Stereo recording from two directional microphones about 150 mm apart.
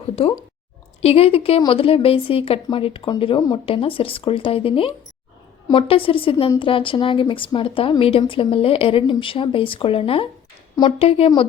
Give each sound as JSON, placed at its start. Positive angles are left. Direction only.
{"t": 1.0, "sound": "a woman's voice", "side_deg": 40}